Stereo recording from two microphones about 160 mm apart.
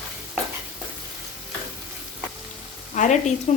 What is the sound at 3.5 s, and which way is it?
Speech, 50° left (ahead or behind).